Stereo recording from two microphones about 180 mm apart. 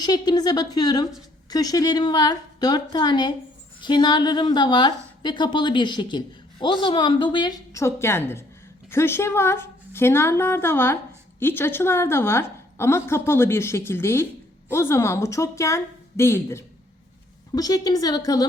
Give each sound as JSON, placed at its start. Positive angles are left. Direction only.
{"t": 0.0, "sound": "a woman's voice", "side_deg": 20}